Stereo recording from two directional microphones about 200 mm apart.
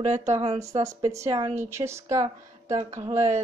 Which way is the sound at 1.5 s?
10° right (ahead or behind).